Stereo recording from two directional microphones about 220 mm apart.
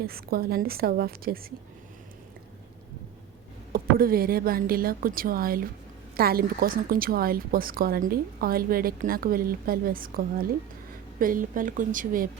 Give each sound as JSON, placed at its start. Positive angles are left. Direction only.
{"t": 0.0, "sound": "a woman's voice", "side_deg": -45}
{"t": 3.7, "sound": "speech", "side_deg": -40}